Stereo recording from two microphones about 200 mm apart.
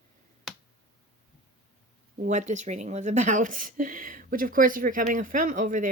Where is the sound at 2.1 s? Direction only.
35° right (ahead or behind).